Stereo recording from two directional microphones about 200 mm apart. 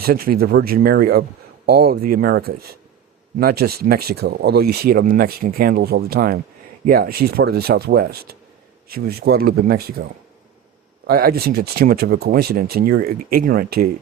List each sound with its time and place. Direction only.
0.0 s speech: 50° right (ahead or behind)